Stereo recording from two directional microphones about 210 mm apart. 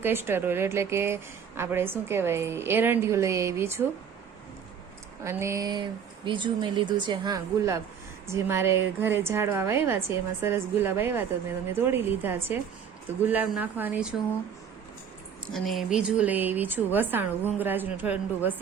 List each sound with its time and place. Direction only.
0.0 s a woman's voice: 10° right (ahead or behind)
5.2 s a woman's voice: 15° right (ahead or behind)
15.5 s a woman's voice: centre (ahead or behind)